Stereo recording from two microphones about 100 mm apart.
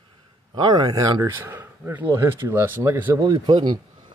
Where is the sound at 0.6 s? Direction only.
45° right (ahead or behind).